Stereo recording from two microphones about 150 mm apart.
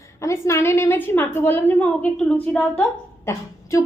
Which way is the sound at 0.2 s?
20° left (ahead or behind).